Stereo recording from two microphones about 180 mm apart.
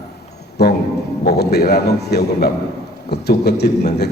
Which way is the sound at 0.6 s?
60° left (ahead or behind).